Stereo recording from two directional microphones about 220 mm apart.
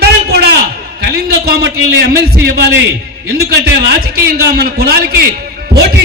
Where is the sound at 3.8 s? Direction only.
45° right (ahead or behind).